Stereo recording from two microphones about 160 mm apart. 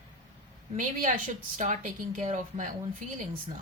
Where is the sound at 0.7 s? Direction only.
50° right (ahead or behind).